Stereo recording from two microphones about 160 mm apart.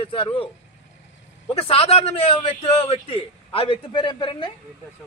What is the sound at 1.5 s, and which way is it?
A man's voice, 35° left (ahead or behind).